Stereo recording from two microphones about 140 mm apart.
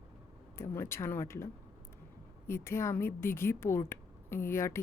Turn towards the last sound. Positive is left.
turn(degrees=20)  # may be behind; listen again after turning